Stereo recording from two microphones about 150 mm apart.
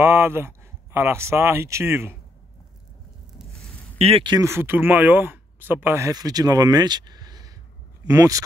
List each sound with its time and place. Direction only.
0.0 s speech: 15° right (ahead or behind)
4.0 s speech: 35° right (ahead or behind)
4.4 s speech: 15° right (ahead or behind)